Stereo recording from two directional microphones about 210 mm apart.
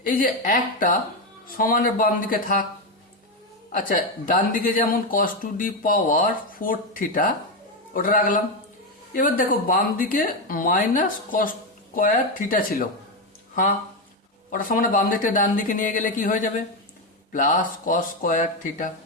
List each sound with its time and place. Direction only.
0.0 s speech: 40° left (ahead or behind)
3.7 s speech: 40° left (ahead or behind)
14.5 s speech: 40° left (ahead or behind)